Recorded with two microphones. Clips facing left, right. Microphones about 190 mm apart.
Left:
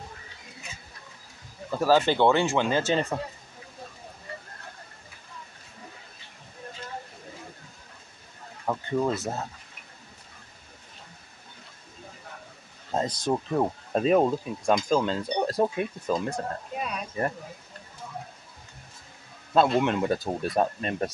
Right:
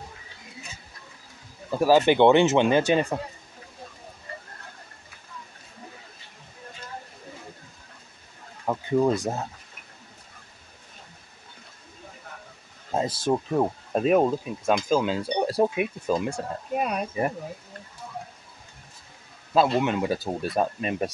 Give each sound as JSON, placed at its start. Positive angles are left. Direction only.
{"t": 1.7, "sound": "speech", "side_deg": -15}
{"t": 8.6, "sound": "speech", "side_deg": -10}
{"t": 12.9, "sound": "speech", "side_deg": -5}
{"t": 16.7, "sound": "speech", "side_deg": -50}
{"t": 19.5, "sound": "speech", "side_deg": 0}